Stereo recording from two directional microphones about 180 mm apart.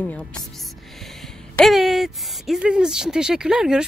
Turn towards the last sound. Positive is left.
turn(degrees=-5)  # may be behind; listen again after turning